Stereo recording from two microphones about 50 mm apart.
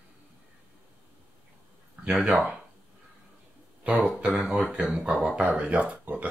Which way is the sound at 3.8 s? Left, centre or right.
Right.